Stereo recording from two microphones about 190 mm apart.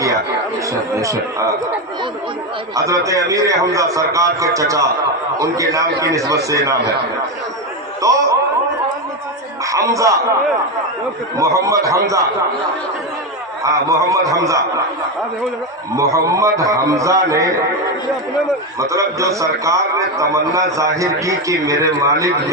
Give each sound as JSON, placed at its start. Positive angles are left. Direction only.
{"t": 1.0, "sound": "a man's voice", "side_deg": -15}
{"t": 2.7, "sound": "a man's voice", "side_deg": -15}
{"t": 8.0, "sound": "a man's voice", "side_deg": -15}
{"t": 9.7, "sound": "a man's voice", "side_deg": -15}
{"t": 11.3, "sound": "a man's voice", "side_deg": -15}
{"t": 13.7, "sound": "a man's voice", "side_deg": -15}
{"t": 16.0, "sound": "a man's voice", "side_deg": -15}
{"t": 18.8, "sound": "a man's voice", "side_deg": -15}